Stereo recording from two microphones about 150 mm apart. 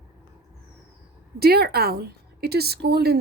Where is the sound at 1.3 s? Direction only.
90° right.